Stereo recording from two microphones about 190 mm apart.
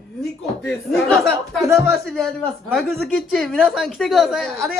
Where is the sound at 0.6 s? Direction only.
5° left (ahead or behind).